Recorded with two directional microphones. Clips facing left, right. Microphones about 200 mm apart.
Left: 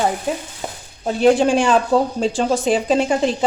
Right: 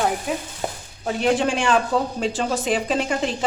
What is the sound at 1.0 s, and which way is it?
A woman's voice, 30° left (ahead or behind).